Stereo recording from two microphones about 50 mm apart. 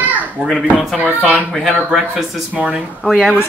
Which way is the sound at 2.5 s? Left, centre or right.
Right.